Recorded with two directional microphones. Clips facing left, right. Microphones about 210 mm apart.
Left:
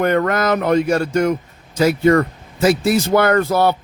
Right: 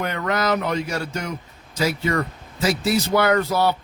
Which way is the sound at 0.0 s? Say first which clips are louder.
Left 7 dB; 55° left (ahead or behind).